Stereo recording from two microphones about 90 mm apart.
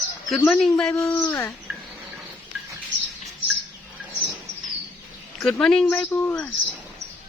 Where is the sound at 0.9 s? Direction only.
30° left (ahead or behind).